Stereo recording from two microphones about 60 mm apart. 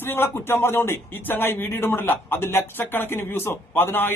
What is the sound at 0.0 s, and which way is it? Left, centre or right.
Speech, left.